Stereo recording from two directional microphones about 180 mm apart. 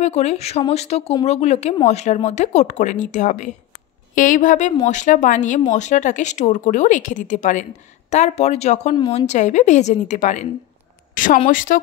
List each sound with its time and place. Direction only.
0.0 s speech: 35° left (ahead or behind)